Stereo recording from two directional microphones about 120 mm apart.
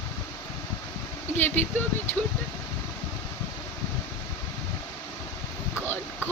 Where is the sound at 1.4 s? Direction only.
15° left (ahead or behind).